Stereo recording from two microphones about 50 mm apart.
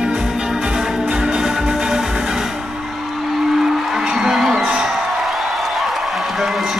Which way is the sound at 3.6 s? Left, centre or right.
Centre.